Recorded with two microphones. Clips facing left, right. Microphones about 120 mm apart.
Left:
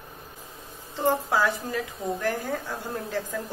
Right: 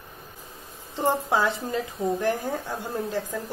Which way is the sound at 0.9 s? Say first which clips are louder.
Even; 20° right (ahead or behind).